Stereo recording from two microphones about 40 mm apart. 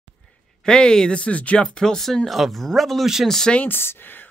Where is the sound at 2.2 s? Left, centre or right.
Centre.